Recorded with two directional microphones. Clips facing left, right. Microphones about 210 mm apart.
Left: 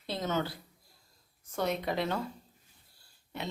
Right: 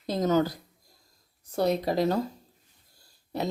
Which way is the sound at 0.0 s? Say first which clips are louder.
Right 8 dB; 40° right (ahead or behind).